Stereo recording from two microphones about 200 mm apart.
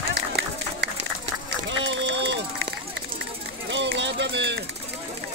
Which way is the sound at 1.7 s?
70° right (ahead or behind).